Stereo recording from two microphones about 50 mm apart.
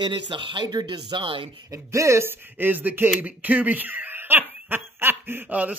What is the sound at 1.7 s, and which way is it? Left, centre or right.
Speech, right.